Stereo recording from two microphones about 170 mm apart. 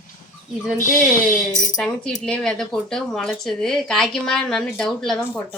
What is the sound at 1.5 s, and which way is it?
Speech, 50° left (ahead or behind).